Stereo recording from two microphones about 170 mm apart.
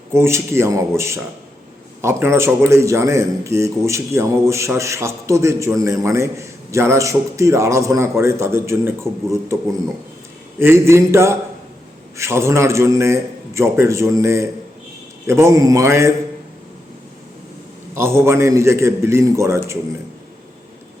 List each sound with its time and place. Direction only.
0.1 s speech: 15° right (ahead or behind)
10.6 s speech: 15° right (ahead or behind)
17.9 s speech: 15° right (ahead or behind)